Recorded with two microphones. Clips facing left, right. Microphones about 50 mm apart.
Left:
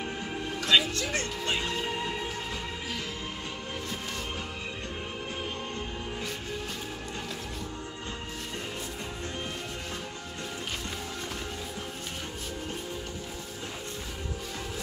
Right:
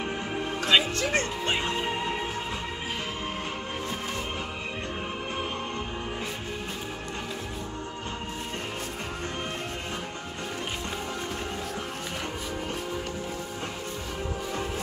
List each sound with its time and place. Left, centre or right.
0.6 s music: right